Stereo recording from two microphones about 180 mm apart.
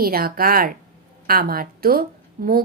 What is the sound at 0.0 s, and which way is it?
A woman's voice, 55° right (ahead or behind).